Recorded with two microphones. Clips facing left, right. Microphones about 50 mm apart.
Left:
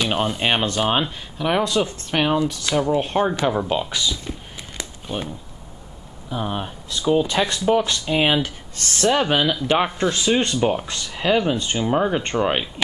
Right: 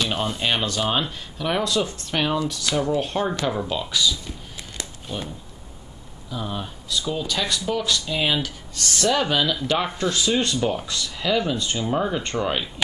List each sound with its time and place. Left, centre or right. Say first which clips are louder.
0.0 s speech: left 3 dB; centre
5.1 s speech: left 4 dB; centre
6.3 s speech: left 4 dB; left